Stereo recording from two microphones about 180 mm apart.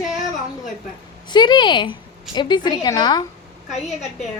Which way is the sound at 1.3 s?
25° left (ahead or behind).